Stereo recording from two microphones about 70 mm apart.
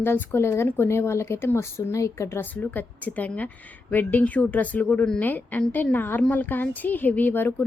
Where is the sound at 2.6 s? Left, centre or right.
Left.